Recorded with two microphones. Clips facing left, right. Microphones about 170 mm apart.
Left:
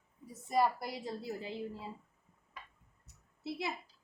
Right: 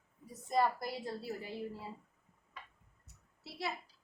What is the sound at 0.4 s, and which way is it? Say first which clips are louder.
A woman's voice: left 1 dB; 10° left (ahead or behind).